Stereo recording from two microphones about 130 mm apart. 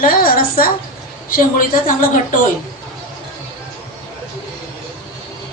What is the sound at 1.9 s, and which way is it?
Speech, 90° left.